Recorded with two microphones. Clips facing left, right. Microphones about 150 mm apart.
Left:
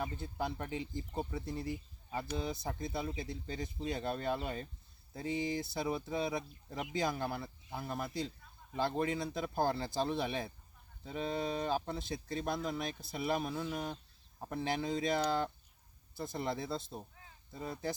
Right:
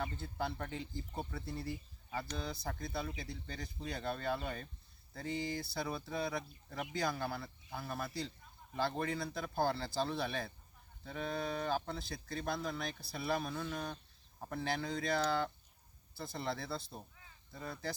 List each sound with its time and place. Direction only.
0.0 s speech: 15° left (ahead or behind)